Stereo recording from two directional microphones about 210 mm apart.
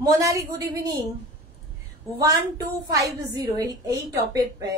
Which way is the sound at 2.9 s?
15° right (ahead or behind).